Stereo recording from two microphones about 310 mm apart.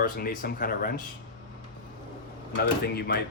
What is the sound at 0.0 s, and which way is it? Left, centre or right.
Speech, left.